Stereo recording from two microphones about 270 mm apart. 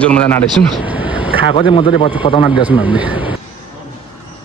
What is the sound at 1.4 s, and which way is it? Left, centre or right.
A man's voice, centre.